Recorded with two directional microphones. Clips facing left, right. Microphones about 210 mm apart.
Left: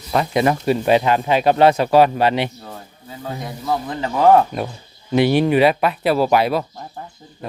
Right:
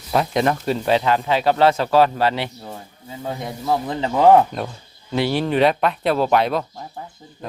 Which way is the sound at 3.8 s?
20° right (ahead or behind).